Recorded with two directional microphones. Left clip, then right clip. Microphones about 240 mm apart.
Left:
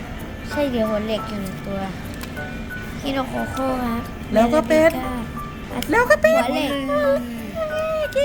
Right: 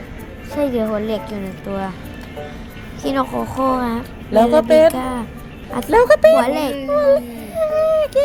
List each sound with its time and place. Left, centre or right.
0.5 s a woman's voice: right
3.0 s a woman's voice: right
7.6 s a sound: centre